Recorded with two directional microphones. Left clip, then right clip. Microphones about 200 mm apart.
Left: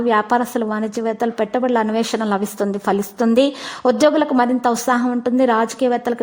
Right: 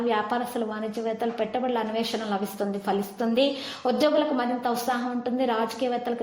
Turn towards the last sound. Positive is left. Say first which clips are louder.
# left 9 dB
turn(degrees=45)  # may be behind; listen again after turning